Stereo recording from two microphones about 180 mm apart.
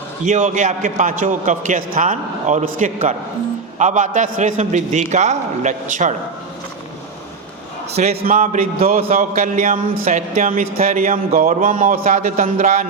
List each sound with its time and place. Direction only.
0.3 s a man's voice: 40° right (ahead or behind)
7.9 s a man's voice: 35° right (ahead or behind)
8.2 s a man's voice: 50° right (ahead or behind)